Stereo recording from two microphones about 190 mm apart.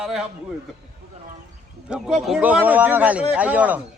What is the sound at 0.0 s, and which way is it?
Speech, centre (ahead or behind).